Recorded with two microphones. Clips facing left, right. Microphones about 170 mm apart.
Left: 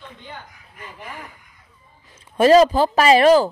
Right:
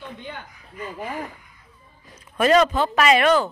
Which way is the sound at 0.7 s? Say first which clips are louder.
Right 7 dB; 50° right (ahead or behind).